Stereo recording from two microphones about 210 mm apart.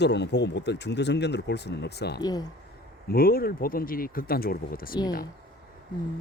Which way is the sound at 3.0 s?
45° left (ahead or behind).